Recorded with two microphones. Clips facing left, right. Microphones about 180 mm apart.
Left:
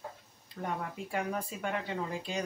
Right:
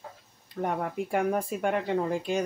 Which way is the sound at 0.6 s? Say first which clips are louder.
Right 7 dB; 60° right (ahead or behind).